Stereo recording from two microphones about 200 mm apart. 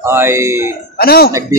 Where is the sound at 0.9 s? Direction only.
50° left (ahead or behind).